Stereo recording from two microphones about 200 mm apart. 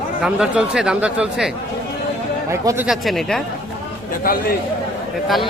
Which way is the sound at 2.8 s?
Centre (ahead or behind).